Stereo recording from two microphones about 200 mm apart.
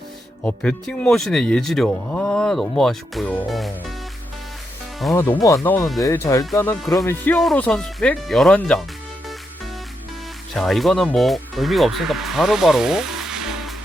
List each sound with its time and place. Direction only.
0.4 s speech: 5° left (ahead or behind)
5.3 s speech: 15° left (ahead or behind)
10.5 s speech: centre (ahead or behind)